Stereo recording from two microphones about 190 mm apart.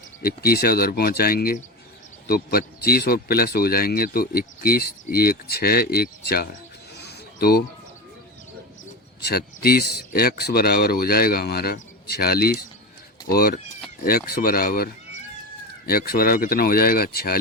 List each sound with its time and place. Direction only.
0.2 s speech: 55° left (ahead or behind)
7.0 s a sound: 55° left (ahead or behind)
9.2 s speech: 55° left (ahead or behind)